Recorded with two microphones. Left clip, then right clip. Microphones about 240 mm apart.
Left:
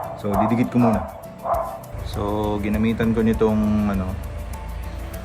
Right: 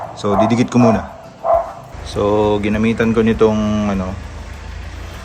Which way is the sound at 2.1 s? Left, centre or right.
Centre.